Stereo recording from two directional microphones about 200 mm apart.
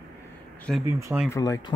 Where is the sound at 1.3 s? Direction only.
20° left (ahead or behind).